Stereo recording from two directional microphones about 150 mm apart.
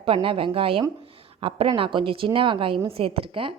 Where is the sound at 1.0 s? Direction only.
40° right (ahead or behind).